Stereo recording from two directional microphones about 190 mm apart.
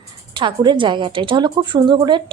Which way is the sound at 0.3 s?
25° right (ahead or behind).